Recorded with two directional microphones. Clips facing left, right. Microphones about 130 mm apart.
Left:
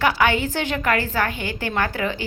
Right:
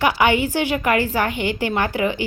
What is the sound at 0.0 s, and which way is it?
A woman's voice, 15° right (ahead or behind).